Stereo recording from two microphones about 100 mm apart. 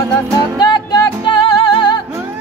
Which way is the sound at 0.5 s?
45° left (ahead or behind).